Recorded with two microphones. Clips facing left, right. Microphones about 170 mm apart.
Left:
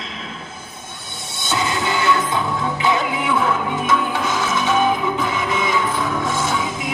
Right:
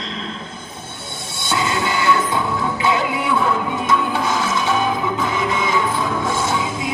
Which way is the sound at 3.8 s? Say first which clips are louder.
Right 1 dB; 20° left (ahead or behind).